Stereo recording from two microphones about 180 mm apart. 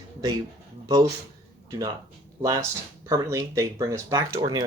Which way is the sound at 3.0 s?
15° right (ahead or behind).